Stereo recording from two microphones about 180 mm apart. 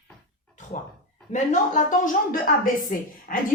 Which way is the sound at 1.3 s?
45° left (ahead or behind).